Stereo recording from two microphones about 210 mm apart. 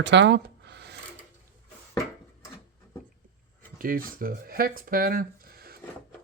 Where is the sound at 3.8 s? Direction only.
40° right (ahead or behind).